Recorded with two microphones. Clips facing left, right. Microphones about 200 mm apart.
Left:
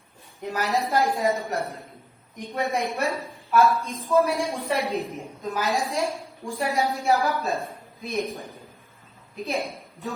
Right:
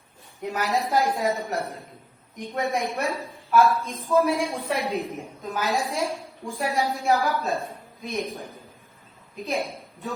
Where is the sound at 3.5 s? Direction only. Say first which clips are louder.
Even; centre (ahead or behind).